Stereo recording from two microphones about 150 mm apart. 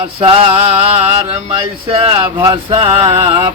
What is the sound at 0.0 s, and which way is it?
Speech, 40° right (ahead or behind).